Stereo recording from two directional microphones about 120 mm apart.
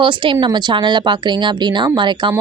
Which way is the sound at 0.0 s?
45° right (ahead or behind).